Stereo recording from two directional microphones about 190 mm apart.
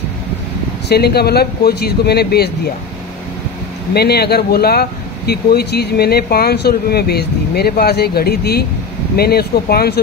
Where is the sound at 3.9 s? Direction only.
55° left (ahead or behind).